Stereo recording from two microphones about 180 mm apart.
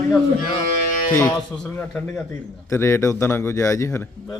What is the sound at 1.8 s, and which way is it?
Speech, 10° left (ahead or behind).